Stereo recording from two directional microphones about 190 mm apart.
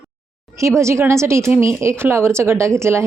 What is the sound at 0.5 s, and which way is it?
Speech, 15° right (ahead or behind).